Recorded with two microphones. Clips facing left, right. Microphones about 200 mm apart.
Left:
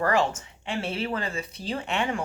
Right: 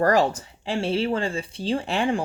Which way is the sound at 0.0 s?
40° right (ahead or behind).